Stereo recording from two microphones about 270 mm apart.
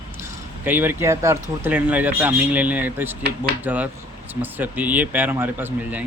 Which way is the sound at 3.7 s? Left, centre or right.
Centre.